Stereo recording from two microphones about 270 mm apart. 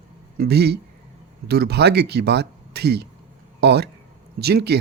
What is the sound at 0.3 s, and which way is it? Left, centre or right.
A man's voice, right.